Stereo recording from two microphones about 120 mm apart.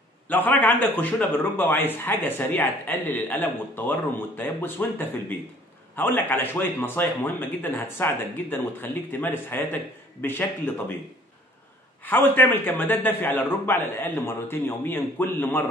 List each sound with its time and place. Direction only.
0.3 s a man's voice: 15° left (ahead or behind)
12.0 s a man's voice: 15° left (ahead or behind)